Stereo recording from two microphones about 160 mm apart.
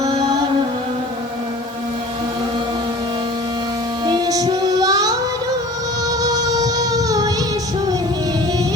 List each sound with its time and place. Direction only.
4.0 s music: 25° right (ahead or behind)